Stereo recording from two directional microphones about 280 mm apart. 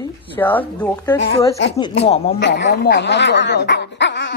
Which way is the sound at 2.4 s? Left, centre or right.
Left.